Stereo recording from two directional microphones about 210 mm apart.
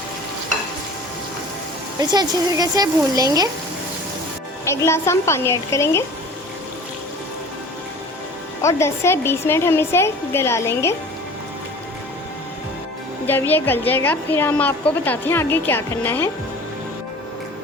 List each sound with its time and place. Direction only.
2.0 s speech: 20° right (ahead or behind)
4.6 s a woman's voice: 10° left (ahead or behind)
8.6 s a woman's voice: 10° left (ahead or behind)
13.2 s a woman's voice: 10° left (ahead or behind)